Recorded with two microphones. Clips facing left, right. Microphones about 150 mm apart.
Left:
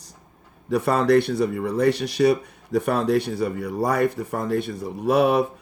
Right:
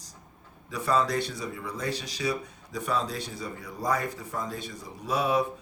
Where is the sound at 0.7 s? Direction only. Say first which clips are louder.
Left 8 dB; 65° left (ahead or behind).